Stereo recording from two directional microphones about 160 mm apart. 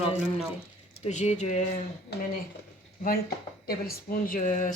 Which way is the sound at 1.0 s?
45° left (ahead or behind).